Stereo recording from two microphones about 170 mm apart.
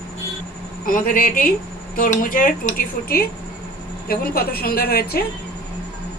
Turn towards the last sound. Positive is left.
turn(degrees=65)  # may be behind; listen again after turning